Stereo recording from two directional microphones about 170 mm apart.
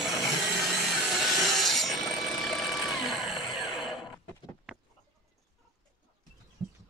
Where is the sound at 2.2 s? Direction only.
Centre (ahead or behind).